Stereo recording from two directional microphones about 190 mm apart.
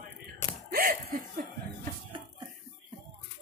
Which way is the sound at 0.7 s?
50° right (ahead or behind).